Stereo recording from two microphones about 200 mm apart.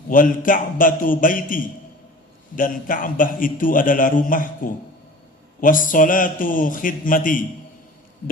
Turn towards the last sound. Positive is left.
turn(degrees=40)  # may be behind; listen again after turning